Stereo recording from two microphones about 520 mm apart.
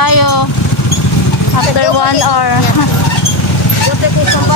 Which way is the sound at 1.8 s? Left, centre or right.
Left.